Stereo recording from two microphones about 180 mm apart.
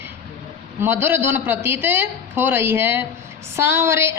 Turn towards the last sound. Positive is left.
turn(degrees=-15)  # may be behind; listen again after turning